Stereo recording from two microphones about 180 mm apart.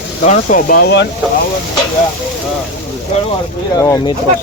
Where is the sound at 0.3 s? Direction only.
50° left (ahead or behind).